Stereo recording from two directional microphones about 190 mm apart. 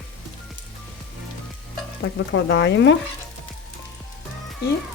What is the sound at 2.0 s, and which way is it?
Speech, 80° left.